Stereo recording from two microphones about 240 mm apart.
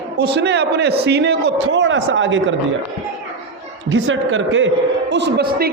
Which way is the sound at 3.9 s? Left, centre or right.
Right.